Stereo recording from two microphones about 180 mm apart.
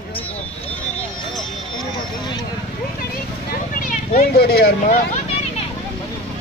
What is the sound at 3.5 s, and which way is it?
Speech, 55° left (ahead or behind).